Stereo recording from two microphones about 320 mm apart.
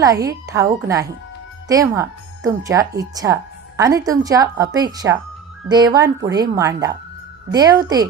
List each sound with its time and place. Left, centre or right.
0.0 s speech: centre